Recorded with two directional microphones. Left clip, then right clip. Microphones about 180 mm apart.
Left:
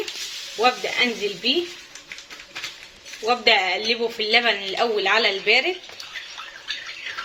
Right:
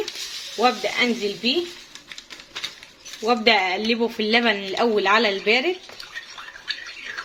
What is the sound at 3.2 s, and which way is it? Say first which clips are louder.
Speech: even; 60° right (ahead or behind).